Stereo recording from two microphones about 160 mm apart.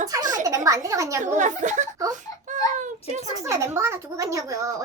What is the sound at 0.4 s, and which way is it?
Speech, 20° right (ahead or behind).